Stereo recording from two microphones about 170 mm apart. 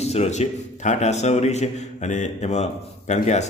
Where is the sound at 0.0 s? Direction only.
40° left (ahead or behind).